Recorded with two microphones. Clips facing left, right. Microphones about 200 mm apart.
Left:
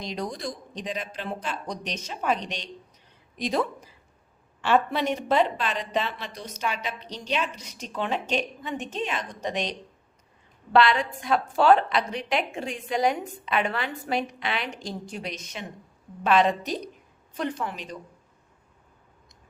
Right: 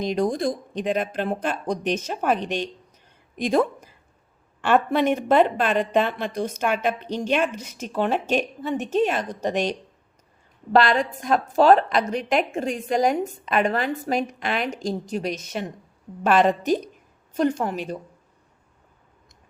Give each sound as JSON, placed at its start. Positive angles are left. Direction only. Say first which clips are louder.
{"t": 0.0, "sound": "a woman's voice", "louder": "right 9 dB", "side_deg": -50}